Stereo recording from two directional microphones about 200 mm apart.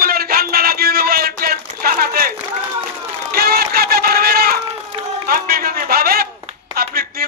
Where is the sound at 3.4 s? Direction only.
50° right (ahead or behind).